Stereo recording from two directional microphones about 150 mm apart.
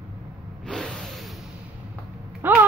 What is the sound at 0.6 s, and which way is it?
Vehicle, 5° left (ahead or behind).